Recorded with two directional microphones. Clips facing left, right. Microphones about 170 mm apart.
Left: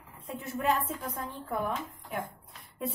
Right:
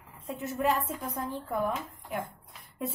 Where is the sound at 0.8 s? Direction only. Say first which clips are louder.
Right 1 dB; 15° right (ahead or behind).